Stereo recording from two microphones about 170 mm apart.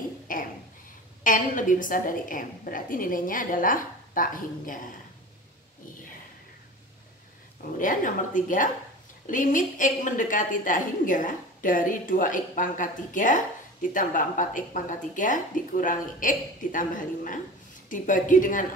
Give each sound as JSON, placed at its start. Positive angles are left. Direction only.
{"t": 0.3, "sound": "a sound", "side_deg": 55}
{"t": 1.2, "sound": "a woman's voice", "side_deg": 50}
{"t": 7.8, "sound": "a woman's voice", "side_deg": 50}